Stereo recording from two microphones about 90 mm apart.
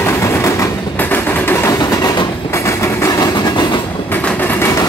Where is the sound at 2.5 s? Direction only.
30° left (ahead or behind); by 3.8 s 55° left (ahead or behind).